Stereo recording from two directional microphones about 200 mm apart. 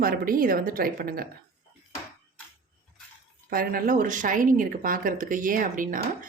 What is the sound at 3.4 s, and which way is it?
A woman's voice, 45° right (ahead or behind).